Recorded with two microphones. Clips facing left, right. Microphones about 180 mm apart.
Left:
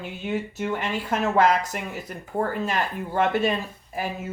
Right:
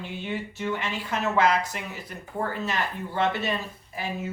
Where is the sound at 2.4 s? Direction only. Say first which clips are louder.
Left 4 dB; 45° left (ahead or behind).